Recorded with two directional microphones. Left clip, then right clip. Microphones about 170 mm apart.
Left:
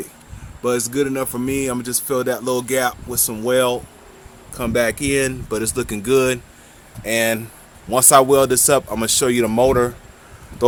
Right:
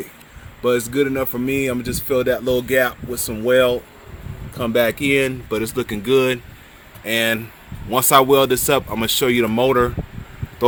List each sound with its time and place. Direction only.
0.6 s speech: 15° right (ahead or behind)